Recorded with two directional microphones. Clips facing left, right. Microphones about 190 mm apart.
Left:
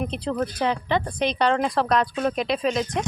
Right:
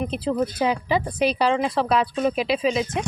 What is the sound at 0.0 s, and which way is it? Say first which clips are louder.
Speech: right 2 dB; 5° right (ahead or behind).